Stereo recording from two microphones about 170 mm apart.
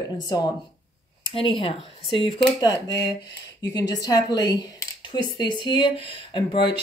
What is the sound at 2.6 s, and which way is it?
Speech, 20° left (ahead or behind).